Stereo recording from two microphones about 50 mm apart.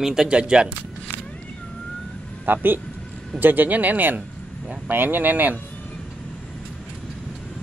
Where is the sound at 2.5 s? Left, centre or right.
Right.